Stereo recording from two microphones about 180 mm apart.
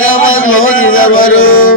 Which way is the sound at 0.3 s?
90° left.